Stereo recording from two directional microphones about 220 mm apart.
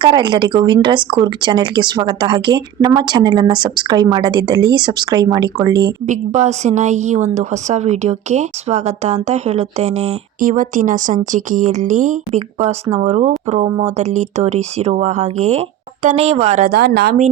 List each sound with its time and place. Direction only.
0.0 s speech: 20° right (ahead or behind)
6.1 s a woman's voice: 30° right (ahead or behind)